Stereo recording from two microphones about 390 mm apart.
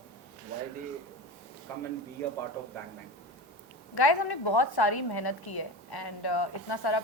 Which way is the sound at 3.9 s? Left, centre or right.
Left.